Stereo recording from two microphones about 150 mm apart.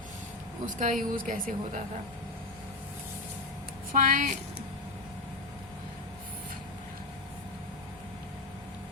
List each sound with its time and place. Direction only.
0.6 s a woman's voice: 60° right (ahead or behind)
3.9 s a woman's voice: 65° right (ahead or behind)